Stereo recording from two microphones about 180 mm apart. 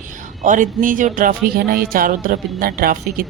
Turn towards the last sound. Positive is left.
turn(degrees=-55)  # may be behind; listen again after turning